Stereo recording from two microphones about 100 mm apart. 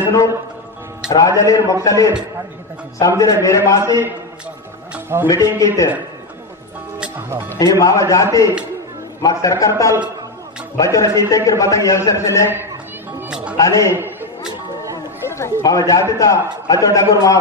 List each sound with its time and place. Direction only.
0.0 s music: 30° left (ahead or behind)
1.1 s a man's voice: 30° left (ahead or behind)
4.9 s a man's voice: 20° right (ahead or behind)
5.3 s a man's voice: 35° left (ahead or behind)
7.2 s speech: 25° right (ahead or behind)
7.5 s a man's voice: 35° left (ahead or behind)
13.6 s a man's voice: 30° left (ahead or behind)
15.2 s a sound: 25° left (ahead or behind)
15.6 s a man's voice: 35° left (ahead or behind)